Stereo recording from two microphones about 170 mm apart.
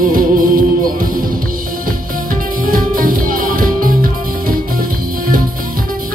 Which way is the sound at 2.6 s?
55° right (ahead or behind).